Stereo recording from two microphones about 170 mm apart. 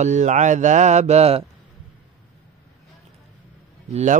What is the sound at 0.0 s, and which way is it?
Mantra, 45° right (ahead or behind).